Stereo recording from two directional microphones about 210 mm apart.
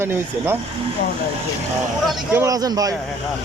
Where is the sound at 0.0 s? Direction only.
10° right (ahead or behind).